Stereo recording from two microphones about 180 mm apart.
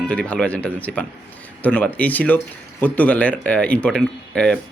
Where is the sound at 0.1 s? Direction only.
5° left (ahead or behind).